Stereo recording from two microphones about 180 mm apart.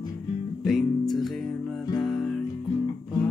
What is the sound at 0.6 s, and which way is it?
Music, centre (ahead or behind).